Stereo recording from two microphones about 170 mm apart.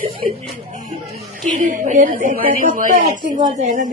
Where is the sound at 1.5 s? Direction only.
50° right (ahead or behind).